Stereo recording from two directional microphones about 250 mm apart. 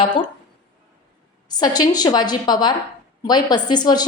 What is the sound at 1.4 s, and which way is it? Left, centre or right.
A woman's voice, centre.